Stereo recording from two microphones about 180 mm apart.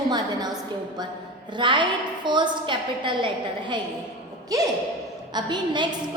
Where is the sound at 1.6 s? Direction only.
25° right (ahead or behind).